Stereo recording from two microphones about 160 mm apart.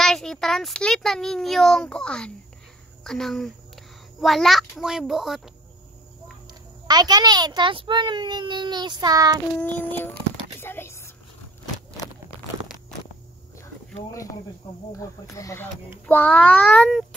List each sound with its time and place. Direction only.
0.0 s a child's voice: 5° left (ahead or behind)
6.9 s a child's voice: 25° right (ahead or behind)
9.6 s a child's voice: 10° left (ahead or behind)
10.6 s a sound: 15° left (ahead or behind)
14.9 s a child's voice: 20° left (ahead or behind); by 17.0 s centre (ahead or behind)